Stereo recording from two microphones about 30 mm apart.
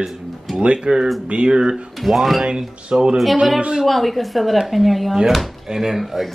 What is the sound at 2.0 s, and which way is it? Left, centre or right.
Speech, centre.